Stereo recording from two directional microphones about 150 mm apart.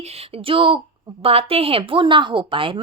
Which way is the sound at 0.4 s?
35° right (ahead or behind).